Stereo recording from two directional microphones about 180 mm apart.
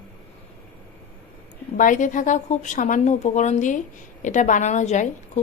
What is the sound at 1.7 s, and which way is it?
A woman's voice, 45° left (ahead or behind).